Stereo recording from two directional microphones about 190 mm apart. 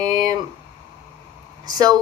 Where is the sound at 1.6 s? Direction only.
20° right (ahead or behind).